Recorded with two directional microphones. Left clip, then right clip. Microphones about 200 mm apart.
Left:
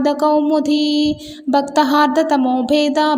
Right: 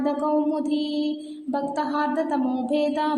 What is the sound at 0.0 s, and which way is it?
Speech, 35° left (ahead or behind).